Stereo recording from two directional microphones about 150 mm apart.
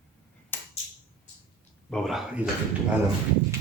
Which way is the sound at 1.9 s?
Centre (ahead or behind).